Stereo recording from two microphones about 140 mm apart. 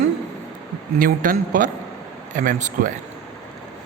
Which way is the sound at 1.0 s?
75° right (ahead or behind).